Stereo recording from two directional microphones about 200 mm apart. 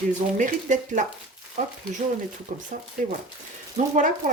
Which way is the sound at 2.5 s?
40° right (ahead or behind).